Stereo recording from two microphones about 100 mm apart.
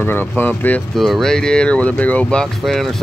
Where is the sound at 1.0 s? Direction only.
5° left (ahead or behind).